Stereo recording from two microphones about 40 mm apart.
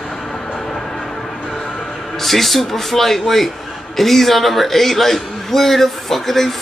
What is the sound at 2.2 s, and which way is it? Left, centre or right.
A man's voice, centre.